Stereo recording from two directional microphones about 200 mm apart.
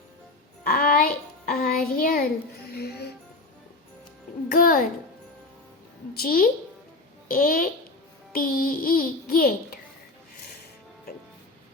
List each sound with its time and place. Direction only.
0.6 s child singing: 50° left (ahead or behind)
2.6 s music: 50° left (ahead or behind)
4.4 s music: 45° left (ahead or behind)
6.1 s a woman's voice: 45° left (ahead or behind)
8.3 s a sound: 45° left (ahead or behind)